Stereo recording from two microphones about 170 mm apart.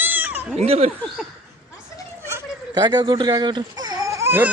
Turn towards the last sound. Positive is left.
turn(degrees=-15)  # may be behind; listen again after turning